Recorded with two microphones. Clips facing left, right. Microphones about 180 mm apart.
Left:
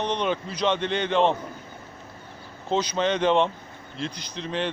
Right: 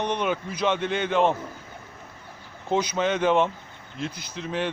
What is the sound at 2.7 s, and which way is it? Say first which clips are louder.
Speech: even; 10° right (ahead or behind).